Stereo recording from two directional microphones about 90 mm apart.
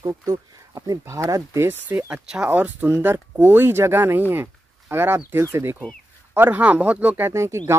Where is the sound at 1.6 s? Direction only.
25° right (ahead or behind).